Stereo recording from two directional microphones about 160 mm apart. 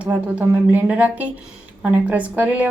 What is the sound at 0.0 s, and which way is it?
Speech, 10° right (ahead or behind).